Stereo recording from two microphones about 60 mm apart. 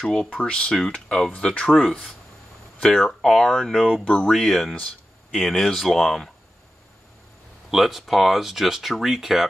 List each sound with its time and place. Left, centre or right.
0.0 s speech: centre
2.8 s speech: centre
4.0 s speech: left
4.3 s speech: centre
7.7 s speech: centre